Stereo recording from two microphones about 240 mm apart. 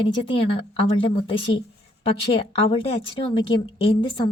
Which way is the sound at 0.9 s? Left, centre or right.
Left.